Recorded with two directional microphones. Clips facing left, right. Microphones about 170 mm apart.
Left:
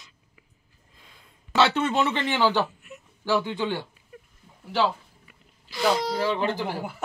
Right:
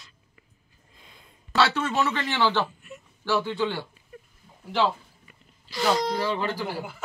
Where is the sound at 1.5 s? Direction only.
20° left (ahead or behind).